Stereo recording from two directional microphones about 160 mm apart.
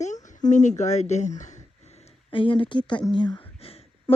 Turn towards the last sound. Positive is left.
turn(degrees=35)  # may be behind; listen again after turning